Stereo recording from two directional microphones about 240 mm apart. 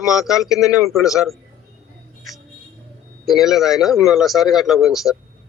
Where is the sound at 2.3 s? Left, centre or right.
Centre.